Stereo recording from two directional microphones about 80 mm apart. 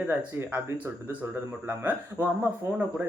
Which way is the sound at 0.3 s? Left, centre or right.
Right.